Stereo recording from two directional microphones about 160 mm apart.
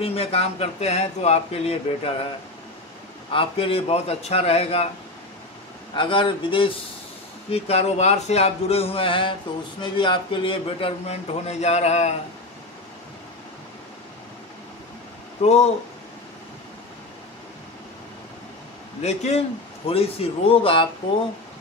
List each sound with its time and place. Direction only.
0.0 s a man's voice: 40° left (ahead or behind)
3.3 s a man's voice: 35° left (ahead or behind)
5.9 s a man's voice: 30° left (ahead or behind)
15.4 s a man's voice: 40° left (ahead or behind)
19.0 s a man's voice: 45° left (ahead or behind)